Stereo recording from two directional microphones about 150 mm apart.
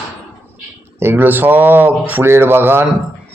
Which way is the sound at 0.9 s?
15° right (ahead or behind).